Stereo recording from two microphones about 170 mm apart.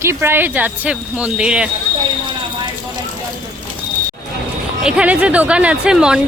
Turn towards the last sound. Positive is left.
turn(degrees=-5)  # may be behind; listen again after turning